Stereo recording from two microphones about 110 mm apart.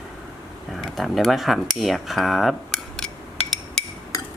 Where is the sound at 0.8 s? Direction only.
Centre (ahead or behind).